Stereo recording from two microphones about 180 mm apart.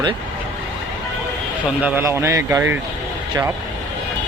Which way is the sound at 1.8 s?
10° right (ahead or behind).